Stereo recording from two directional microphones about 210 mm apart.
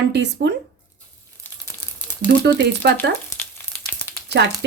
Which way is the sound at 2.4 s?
55° right (ahead or behind).